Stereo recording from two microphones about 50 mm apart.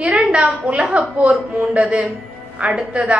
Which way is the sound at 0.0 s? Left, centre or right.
Right.